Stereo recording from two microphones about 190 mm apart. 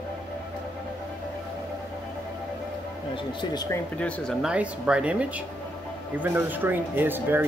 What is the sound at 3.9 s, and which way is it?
Speech, 5° left (ahead or behind).